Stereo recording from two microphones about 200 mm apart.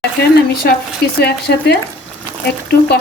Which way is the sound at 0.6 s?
55° left (ahead or behind).